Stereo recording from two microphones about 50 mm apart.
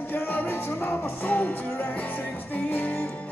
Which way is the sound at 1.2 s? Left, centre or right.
Left.